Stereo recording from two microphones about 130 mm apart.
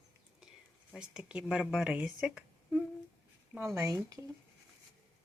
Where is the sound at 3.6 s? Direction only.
25° right (ahead or behind).